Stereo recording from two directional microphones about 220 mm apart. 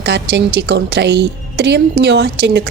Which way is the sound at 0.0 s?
50° right (ahead or behind).